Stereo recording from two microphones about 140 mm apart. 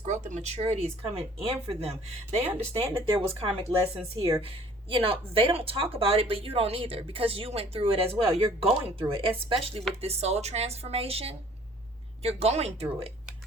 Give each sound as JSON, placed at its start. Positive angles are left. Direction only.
{"t": 0.0, "sound": "speech", "side_deg": -60}